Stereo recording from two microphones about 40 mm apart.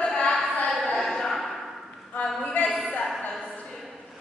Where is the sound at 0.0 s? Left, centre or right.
Centre.